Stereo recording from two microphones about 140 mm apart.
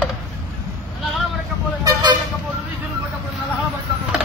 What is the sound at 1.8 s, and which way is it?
Vehicle, 30° right (ahead or behind).